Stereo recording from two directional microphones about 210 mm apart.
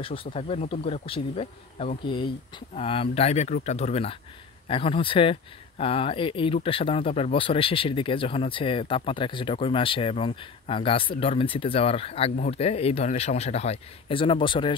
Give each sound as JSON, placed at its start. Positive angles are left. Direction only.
{"t": 0.0, "sound": "speech", "side_deg": 25}